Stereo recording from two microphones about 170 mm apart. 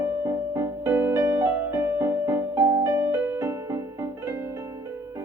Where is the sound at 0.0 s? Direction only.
15° right (ahead or behind).